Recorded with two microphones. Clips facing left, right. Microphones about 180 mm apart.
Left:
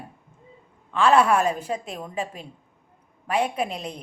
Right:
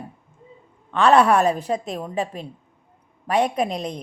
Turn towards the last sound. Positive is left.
turn(degrees=-35)  # may be behind; listen again after turning